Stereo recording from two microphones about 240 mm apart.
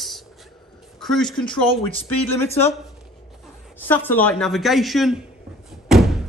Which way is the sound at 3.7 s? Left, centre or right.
Centre.